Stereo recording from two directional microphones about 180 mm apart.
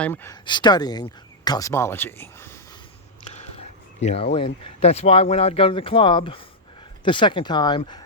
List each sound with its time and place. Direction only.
0.0 s speech: 10° left (ahead or behind)
0.4 s speech: 25° left (ahead or behind)
4.0 s speech: 35° left (ahead or behind)